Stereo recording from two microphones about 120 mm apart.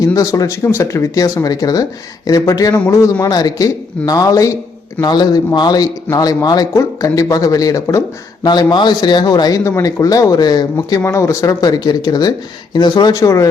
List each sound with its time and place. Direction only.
0.1 s speech: 30° left (ahead or behind)
8.4 s speech: 40° left (ahead or behind)
13.1 s speech: 25° left (ahead or behind)